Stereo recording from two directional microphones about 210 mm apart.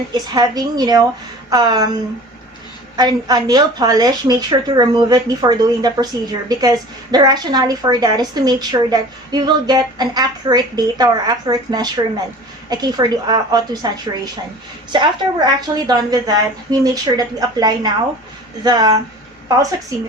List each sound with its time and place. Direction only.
0.1 s a woman's voice: 20° right (ahead or behind)